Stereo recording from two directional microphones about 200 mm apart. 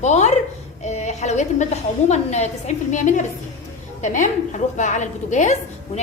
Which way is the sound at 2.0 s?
35° left (ahead or behind).